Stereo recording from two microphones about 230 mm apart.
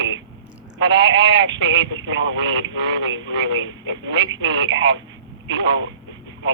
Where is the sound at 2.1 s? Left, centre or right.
Right.